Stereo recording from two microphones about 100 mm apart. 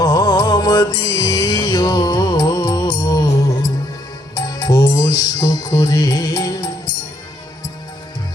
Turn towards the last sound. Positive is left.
turn(degrees=40)  # may be behind; listen again after turning